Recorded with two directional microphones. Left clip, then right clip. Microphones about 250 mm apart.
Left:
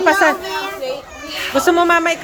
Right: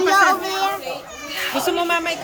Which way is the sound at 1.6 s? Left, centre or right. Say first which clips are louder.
Left 8 dB; centre.